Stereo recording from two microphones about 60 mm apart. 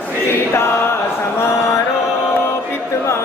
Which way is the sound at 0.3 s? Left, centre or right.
Left.